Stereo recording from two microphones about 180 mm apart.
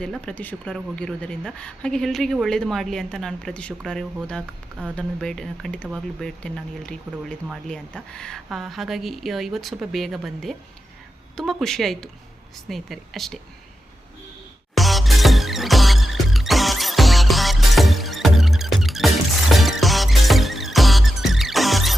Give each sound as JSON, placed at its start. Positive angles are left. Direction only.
{"t": 0.0, "sound": "speech", "side_deg": 5}
{"t": 14.8, "sound": "music", "side_deg": 0}